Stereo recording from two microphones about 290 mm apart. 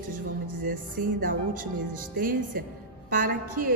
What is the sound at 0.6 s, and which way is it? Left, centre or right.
A woman's voice, right.